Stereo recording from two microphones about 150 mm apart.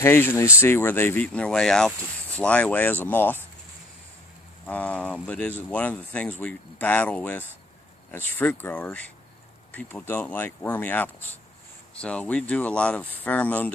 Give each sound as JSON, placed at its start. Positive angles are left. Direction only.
{"t": 0.0, "sound": "speech", "side_deg": 15}
{"t": 4.6, "sound": "speech", "side_deg": 10}